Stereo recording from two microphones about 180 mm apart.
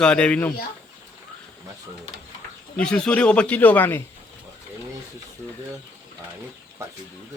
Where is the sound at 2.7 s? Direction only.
5° left (ahead or behind).